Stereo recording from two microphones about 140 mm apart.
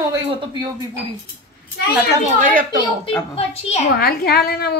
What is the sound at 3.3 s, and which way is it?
Speech, 50° left (ahead or behind).